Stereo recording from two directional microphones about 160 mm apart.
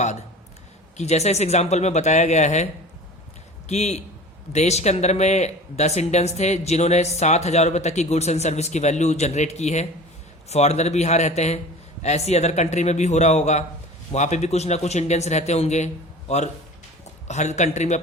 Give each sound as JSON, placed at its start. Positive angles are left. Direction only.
{"t": 0.9, "sound": "speech", "side_deg": 45}
{"t": 3.7, "sound": "speech", "side_deg": 45}
{"t": 17.2, "sound": "speech", "side_deg": 45}